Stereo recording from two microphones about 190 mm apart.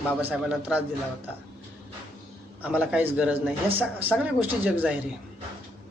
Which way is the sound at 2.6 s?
5° right (ahead or behind).